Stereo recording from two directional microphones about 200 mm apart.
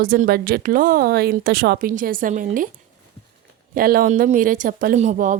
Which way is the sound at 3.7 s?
45° right (ahead or behind).